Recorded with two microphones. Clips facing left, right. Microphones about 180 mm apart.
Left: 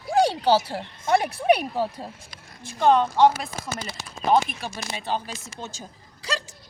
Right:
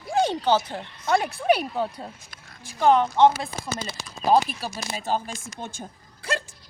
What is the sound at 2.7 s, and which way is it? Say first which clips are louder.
Speech: even; 15° right (ahead or behind).